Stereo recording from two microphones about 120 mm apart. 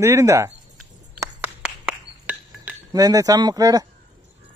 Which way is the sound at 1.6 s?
10° right (ahead or behind).